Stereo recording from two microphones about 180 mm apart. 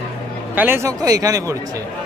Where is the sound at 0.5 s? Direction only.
10° right (ahead or behind).